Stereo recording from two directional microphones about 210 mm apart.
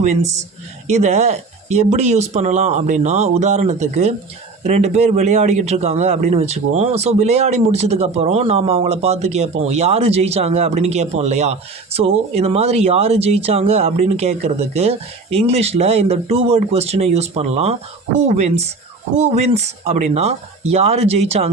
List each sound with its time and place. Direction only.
0.9 s a man's voice: 35° right (ahead or behind)